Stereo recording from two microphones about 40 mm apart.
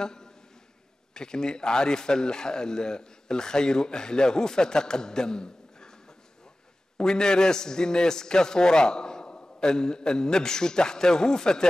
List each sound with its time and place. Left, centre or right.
0.0 s a man's voice: centre